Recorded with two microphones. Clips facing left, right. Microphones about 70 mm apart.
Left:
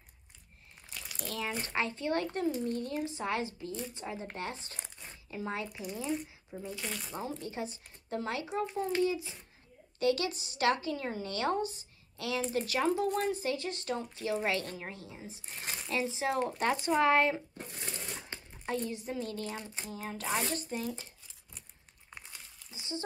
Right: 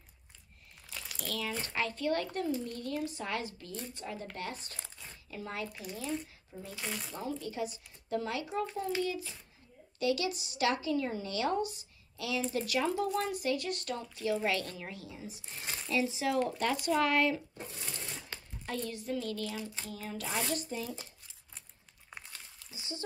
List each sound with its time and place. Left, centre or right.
1.2 s speech: left
4.7 s crumpling: left
6.8 s speech: centre
7.2 s a woman's voice: left
9.9 s a woman's voice: left
22.7 s a sound: left